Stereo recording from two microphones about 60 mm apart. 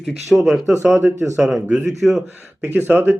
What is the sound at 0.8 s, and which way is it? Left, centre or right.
Speech, right.